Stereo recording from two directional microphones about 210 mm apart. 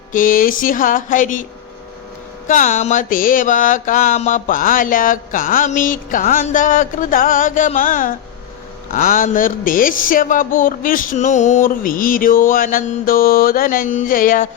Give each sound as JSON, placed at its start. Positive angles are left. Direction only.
{"t": 0.1, "sound": "mantra", "side_deg": 40}
{"t": 2.5, "sound": "mantra", "side_deg": 35}